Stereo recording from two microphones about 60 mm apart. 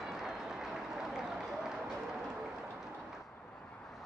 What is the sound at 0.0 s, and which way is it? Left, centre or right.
Run, centre.